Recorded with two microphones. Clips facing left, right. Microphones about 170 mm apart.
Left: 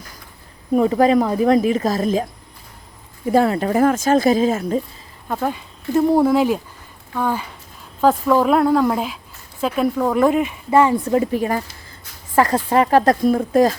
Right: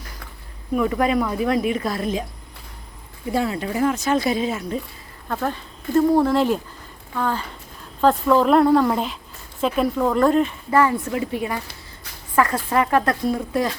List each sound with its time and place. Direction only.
0.7 s a woman's voice: 35° left (ahead or behind)
3.3 s speech: 50° left (ahead or behind)
5.3 s speech: 10° left (ahead or behind)
10.7 s a woman's voice: 20° left (ahead or behind)
11.1 s a woman's voice: 40° left (ahead or behind)
13.3 s speech: 45° left (ahead or behind)